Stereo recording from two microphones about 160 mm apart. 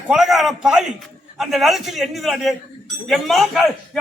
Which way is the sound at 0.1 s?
Centre (ahead or behind).